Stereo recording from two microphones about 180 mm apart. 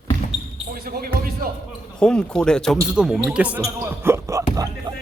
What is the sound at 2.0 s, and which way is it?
Speech, 5° left (ahead or behind).